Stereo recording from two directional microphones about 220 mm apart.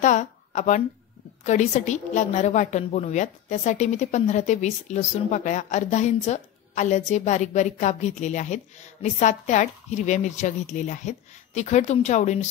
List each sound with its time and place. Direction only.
0.0 s a woman's voice: 35° left (ahead or behind)